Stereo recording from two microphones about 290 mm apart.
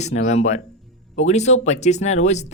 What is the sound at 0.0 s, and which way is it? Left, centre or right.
Speech, left.